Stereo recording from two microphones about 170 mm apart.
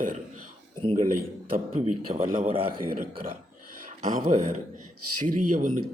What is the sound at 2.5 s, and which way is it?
Speech, 35° right (ahead or behind).